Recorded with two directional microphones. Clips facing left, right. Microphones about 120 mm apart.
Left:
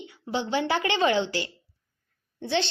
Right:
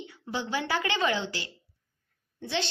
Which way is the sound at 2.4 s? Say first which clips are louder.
Left 5 dB; 30° left (ahead or behind).